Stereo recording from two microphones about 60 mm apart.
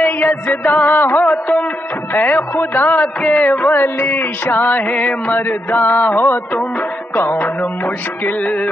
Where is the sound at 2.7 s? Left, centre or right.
Left.